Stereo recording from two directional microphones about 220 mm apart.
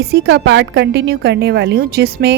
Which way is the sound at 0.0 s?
50° right (ahead or behind).